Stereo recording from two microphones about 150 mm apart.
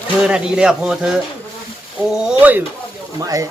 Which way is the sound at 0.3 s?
5° right (ahead or behind).